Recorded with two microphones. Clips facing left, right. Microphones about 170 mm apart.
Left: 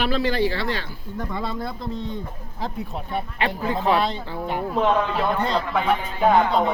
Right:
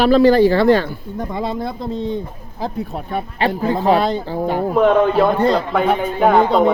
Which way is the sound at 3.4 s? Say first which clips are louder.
Right 7 dB; 35° right (ahead or behind).